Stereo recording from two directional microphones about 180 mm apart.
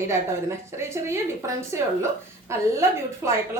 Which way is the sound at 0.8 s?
15° right (ahead or behind).